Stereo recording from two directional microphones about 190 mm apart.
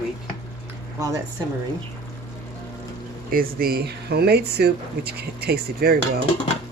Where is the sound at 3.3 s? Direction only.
50° right (ahead or behind).